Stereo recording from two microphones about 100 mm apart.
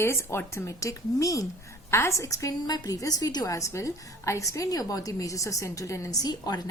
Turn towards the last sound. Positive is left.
turn(degrees=40)  # may be behind; listen again after turning